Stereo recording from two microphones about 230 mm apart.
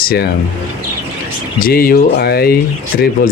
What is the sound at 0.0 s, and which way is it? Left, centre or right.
Speech, left.